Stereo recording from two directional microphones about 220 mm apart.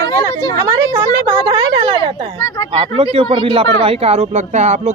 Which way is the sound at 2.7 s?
25° right (ahead or behind).